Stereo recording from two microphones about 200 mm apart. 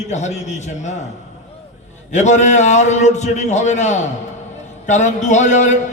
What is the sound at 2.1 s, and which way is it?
A man's voice, 35° left (ahead or behind).